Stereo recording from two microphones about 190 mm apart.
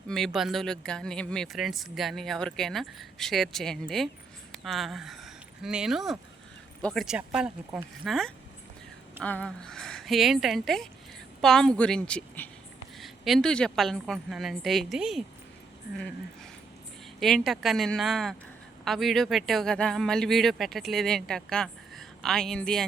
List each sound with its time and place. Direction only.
0.3 s speech: centre (ahead or behind)
17.2 s speech: centre (ahead or behind)